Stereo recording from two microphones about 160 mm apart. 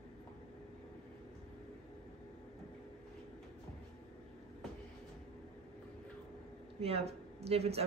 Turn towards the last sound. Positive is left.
turn(degrees=-40)  # may be behind; listen again after turning